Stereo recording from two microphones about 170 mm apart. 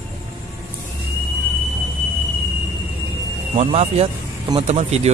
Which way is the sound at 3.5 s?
40° right (ahead or behind).